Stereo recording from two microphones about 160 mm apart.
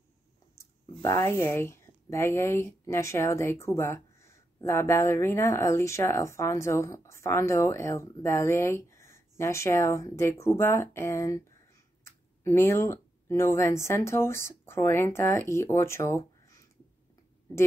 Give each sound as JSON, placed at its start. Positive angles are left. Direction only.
{"t": 0.6, "sound": "speech", "side_deg": 20}